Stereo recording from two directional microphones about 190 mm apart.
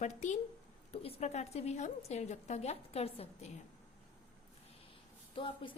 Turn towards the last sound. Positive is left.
turn(degrees=25)  # may be behind; listen again after turning